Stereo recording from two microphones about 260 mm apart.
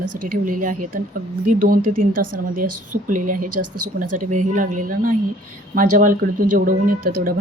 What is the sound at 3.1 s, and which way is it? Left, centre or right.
Speech, right.